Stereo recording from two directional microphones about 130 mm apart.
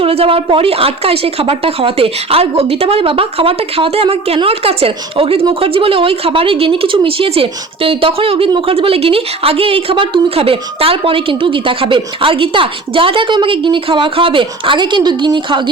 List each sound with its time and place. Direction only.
0.0 s a woman's voice: 45° right (ahead or behind)